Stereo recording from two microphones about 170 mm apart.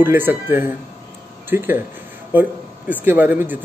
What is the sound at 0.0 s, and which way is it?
Speech, 10° right (ahead or behind).